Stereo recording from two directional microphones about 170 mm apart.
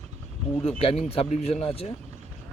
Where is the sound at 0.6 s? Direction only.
35° left (ahead or behind).